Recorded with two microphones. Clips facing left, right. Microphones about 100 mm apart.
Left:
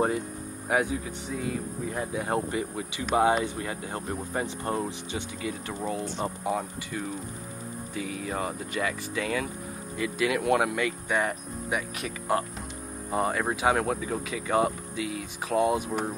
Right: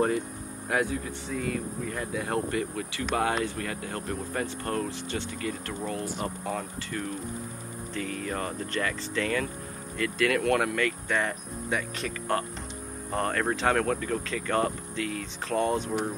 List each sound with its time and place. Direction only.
0.7 s speech: 15° left (ahead or behind)